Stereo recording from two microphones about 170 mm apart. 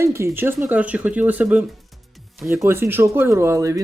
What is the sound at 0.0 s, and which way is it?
Speech, 15° right (ahead or behind).